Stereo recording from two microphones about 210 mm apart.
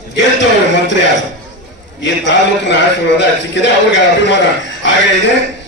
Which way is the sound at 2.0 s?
60° left (ahead or behind).